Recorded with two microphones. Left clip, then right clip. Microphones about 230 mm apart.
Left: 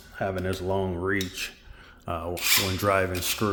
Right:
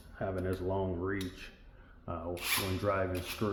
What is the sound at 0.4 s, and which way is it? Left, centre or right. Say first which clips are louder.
Speech: left 6 dB; left.